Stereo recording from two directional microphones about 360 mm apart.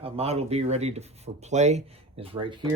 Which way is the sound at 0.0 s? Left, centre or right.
Centre.